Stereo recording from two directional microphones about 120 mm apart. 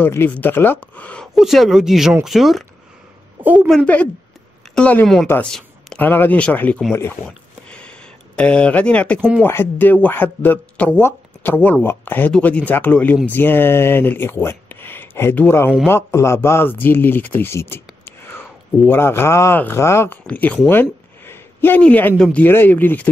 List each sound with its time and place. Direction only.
0.0 s speech: 15° left (ahead or behind); by 2.6 s centre (ahead or behind)
3.6 s a woman's voice: 5° left (ahead or behind)
5.4 s a sound: 5° left (ahead or behind)
6.0 s speech: 15° left (ahead or behind)
7.7 s a sound: 10° left (ahead or behind)
9.4 s speech: 15° left (ahead or behind)
20.2 s speech: 10° left (ahead or behind)